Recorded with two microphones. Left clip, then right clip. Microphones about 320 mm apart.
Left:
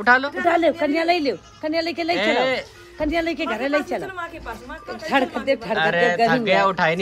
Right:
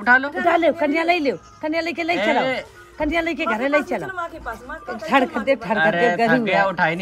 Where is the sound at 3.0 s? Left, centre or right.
Right.